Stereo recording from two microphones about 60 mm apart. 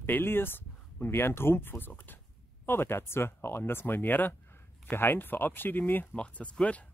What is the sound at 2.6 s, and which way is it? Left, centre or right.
Speech, left.